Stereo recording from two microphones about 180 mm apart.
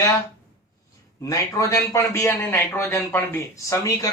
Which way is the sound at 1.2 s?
15° left (ahead or behind).